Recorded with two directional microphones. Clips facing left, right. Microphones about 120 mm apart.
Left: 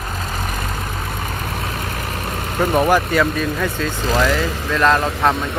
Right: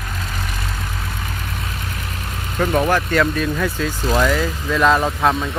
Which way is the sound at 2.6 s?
15° left (ahead or behind).